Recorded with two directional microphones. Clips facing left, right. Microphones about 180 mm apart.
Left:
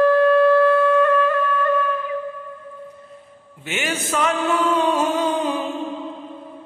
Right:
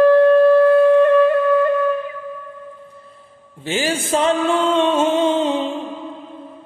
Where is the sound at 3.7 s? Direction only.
30° right (ahead or behind).